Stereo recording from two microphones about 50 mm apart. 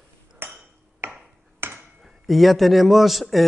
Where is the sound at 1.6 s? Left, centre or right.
Right.